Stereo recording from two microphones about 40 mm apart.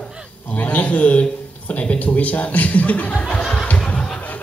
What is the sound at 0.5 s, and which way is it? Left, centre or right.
A man's voice, left.